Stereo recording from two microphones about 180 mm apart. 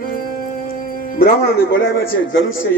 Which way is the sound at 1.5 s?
65° left (ahead or behind).